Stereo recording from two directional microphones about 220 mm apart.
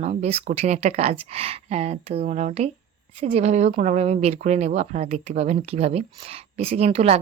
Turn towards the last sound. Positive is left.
turn(degrees=-30)  # may be behind; listen again after turning